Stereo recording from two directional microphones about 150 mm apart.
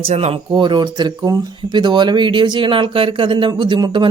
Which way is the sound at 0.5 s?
30° right (ahead or behind).